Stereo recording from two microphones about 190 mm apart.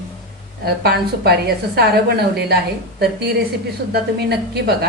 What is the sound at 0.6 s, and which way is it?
A woman's voice, 60° right (ahead or behind).